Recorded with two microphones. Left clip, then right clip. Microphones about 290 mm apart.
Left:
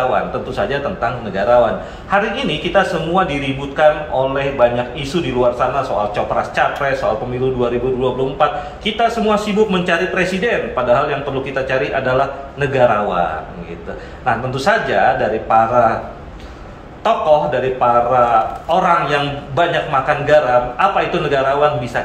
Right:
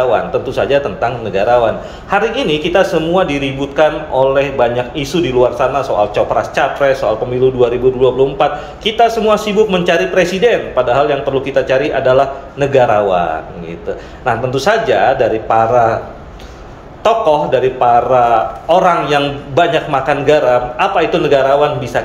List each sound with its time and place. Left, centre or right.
0.1 s a man's voice: right
14.2 s a man's voice: right
17.0 s a man's voice: right